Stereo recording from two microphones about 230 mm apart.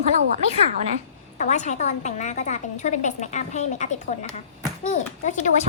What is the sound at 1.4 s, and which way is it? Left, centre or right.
A woman's voice, left.